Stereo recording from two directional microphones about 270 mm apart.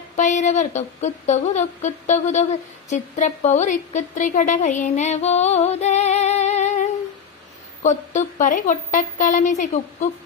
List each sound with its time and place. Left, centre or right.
0.2 s a woman's voice: left